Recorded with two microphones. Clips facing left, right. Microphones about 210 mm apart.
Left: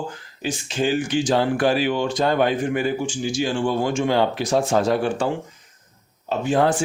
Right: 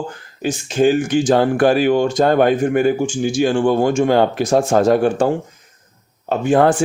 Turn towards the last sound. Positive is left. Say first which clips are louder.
# right 5 dB
turn(degrees=-55)  # may be behind; listen again after turning